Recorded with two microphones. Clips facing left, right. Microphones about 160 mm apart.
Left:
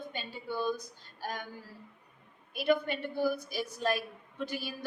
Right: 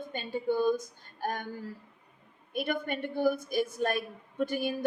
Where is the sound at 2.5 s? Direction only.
50° right (ahead or behind).